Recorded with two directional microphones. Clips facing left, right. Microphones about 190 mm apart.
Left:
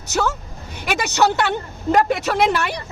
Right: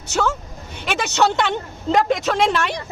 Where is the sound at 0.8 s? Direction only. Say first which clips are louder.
Left 1 dB; 10° left (ahead or behind).